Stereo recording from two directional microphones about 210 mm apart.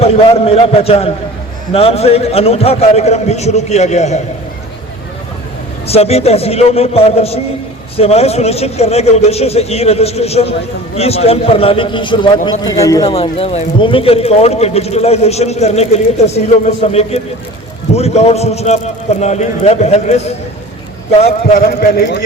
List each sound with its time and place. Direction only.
0.0 s a man's voice: 30° left (ahead or behind)
5.9 s a man's voice: 30° left (ahead or behind)
21.6 s speech: 45° left (ahead or behind)